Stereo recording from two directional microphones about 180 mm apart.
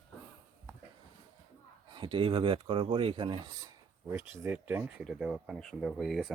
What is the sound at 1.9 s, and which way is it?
Speech, 25° right (ahead or behind).